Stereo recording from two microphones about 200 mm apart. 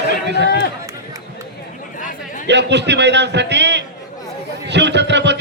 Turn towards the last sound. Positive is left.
turn(degrees=-60)  # may be behind; listen again after turning